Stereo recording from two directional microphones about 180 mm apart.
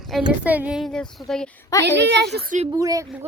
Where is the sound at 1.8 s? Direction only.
75° right (ahead or behind).